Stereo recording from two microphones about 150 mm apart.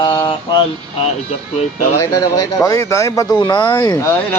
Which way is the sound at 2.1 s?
20° left (ahead or behind).